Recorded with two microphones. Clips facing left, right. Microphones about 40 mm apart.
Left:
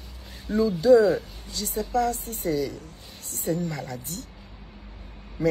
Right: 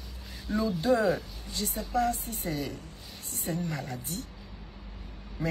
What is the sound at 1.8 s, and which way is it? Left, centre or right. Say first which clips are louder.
Speech: left 4 dB; left.